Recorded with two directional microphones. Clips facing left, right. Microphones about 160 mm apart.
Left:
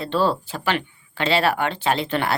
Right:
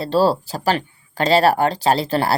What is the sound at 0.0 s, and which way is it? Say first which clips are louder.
Speech: right 4 dB; 35° right (ahead or behind).